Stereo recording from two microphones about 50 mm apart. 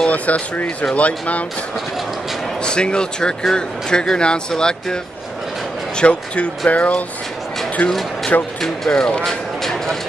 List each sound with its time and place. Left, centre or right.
0.0 s speech: left
2.6 s speech: centre
5.9 s speech: left
8.5 s speech: centre
9.6 s vehicle: centre